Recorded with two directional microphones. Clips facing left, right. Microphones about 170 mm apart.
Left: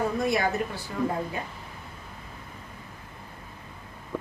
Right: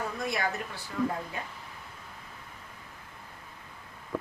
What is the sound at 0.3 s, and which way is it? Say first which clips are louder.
A woman's voice: left 6 dB; 25° left (ahead or behind).